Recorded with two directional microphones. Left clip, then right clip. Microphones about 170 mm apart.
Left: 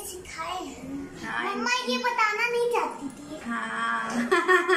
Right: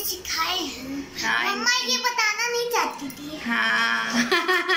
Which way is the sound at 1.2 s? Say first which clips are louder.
Right 7 dB; 5° left (ahead or behind).